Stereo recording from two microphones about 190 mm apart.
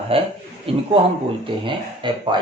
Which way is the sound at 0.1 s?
30° right (ahead or behind).